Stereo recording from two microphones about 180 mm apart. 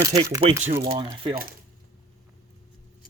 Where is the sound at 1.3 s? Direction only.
50° right (ahead or behind).